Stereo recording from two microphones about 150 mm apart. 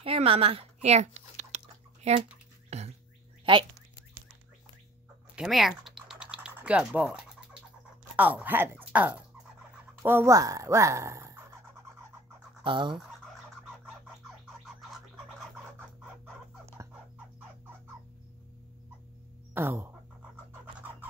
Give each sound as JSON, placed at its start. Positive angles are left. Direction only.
{"t": 0.0, "sound": "a sound", "side_deg": -40}
{"t": 2.0, "sound": "speech", "side_deg": -45}
{"t": 2.7, "sound": "bird", "side_deg": -45}
{"t": 3.5, "sound": "speech", "side_deg": -35}
{"t": 5.3, "sound": "typing", "side_deg": -5}
{"t": 8.2, "sound": "speech", "side_deg": -10}
{"t": 12.6, "sound": "speech", "side_deg": -30}
{"t": 16.8, "sound": "a sound", "side_deg": -20}
{"t": 19.5, "sound": "speech", "side_deg": -15}